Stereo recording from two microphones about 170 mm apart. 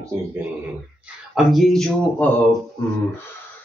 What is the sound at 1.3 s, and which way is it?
Speech, centre (ahead or behind).